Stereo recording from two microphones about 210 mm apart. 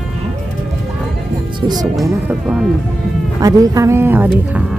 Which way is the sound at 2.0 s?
5° right (ahead or behind).